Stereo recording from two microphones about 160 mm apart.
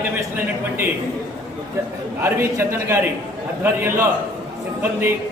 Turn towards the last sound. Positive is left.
turn(degrees=-15)  # may be behind; listen again after turning